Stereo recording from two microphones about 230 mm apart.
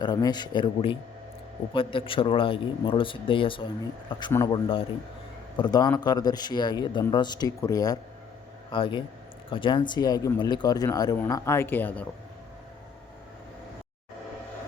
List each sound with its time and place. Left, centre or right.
0.0 s speech: centre